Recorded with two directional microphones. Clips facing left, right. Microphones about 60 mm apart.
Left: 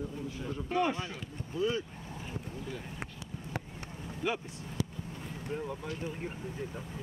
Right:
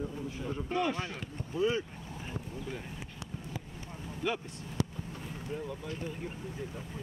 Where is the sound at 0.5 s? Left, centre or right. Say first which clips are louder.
Right 2 dB; centre.